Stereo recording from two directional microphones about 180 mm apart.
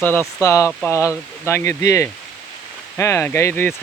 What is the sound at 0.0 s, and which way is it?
Speech, 10° left (ahead or behind).